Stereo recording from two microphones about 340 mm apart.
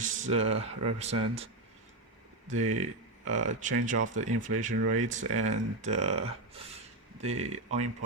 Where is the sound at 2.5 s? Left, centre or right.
Right.